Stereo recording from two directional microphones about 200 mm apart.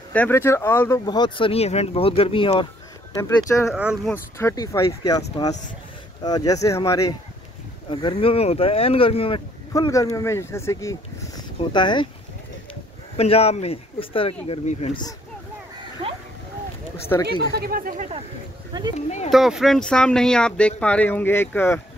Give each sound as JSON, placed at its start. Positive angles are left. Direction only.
{"t": 0.1, "sound": "speech", "side_deg": 10}
{"t": 3.7, "sound": "speech", "side_deg": -5}
{"t": 4.1, "sound": "speech", "side_deg": 15}
{"t": 6.2, "sound": "speech", "side_deg": 20}
{"t": 13.1, "sound": "speech", "side_deg": 30}
{"t": 17.1, "sound": "speech", "side_deg": 15}
{"t": 17.6, "sound": "speech", "side_deg": -45}
{"t": 18.7, "sound": "speech", "side_deg": -20}
{"t": 18.9, "sound": "speech", "side_deg": 35}
{"t": 19.3, "sound": "speech", "side_deg": 0}